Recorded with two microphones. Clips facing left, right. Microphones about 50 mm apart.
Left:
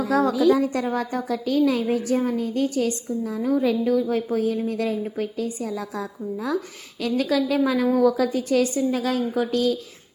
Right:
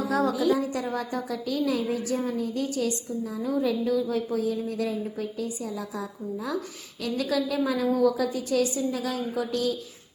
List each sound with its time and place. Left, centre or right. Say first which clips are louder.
0.0 s a woman's voice: left 5 dB; left